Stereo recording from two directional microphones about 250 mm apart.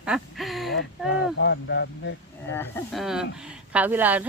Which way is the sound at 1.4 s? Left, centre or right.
Left.